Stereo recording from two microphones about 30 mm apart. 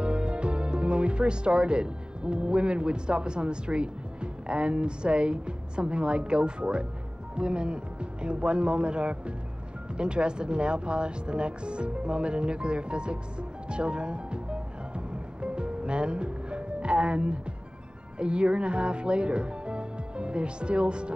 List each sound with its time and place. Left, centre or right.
0.0 s speech: right